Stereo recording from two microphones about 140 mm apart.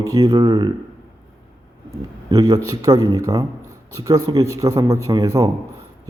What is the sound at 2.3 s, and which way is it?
A man's voice, 25° right (ahead or behind).